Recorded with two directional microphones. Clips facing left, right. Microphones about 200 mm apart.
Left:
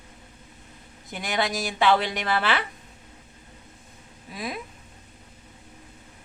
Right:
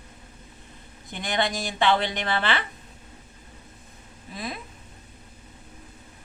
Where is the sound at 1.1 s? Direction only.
10° left (ahead or behind).